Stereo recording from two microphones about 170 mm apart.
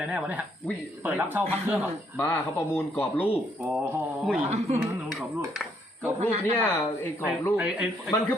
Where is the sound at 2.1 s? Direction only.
10° left (ahead or behind).